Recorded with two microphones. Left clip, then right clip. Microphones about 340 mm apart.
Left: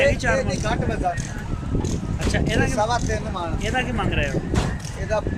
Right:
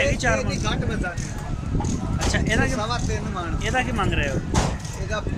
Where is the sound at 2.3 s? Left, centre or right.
Centre.